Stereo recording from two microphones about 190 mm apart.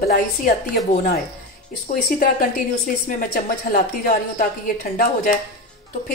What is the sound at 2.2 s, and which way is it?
A woman's voice, 45° left (ahead or behind).